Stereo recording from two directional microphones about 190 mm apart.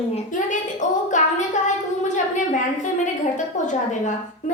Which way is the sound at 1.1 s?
40° left (ahead or behind).